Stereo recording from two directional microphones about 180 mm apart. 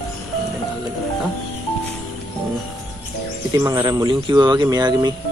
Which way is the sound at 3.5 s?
20° right (ahead or behind).